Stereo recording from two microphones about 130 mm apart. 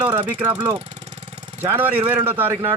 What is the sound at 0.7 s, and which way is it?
Vehicle, 55° right (ahead or behind).